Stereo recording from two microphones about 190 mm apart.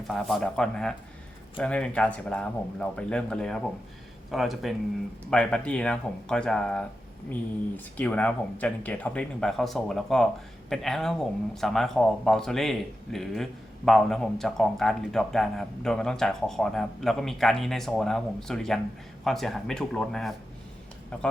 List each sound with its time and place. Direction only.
0.1 s speech: centre (ahead or behind)
7.9 s speech: 5° left (ahead or behind)